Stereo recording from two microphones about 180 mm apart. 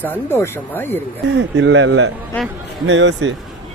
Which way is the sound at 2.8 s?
90° right.